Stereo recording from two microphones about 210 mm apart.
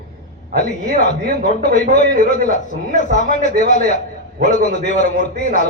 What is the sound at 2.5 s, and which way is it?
A man's voice, 35° left (ahead or behind).